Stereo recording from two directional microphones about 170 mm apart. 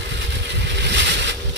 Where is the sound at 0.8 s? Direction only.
90° right.